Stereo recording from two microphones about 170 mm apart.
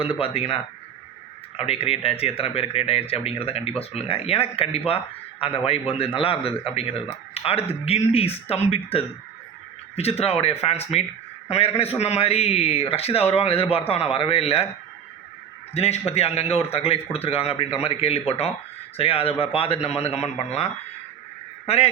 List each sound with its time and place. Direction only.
0.0 s a man's voice: 35° left (ahead or behind)
15.7 s speech: 40° left (ahead or behind)